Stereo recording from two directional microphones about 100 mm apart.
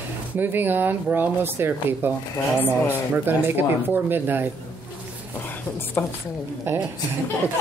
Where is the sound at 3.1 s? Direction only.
20° right (ahead or behind).